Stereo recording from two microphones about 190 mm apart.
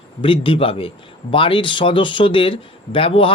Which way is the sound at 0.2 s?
25° left (ahead or behind).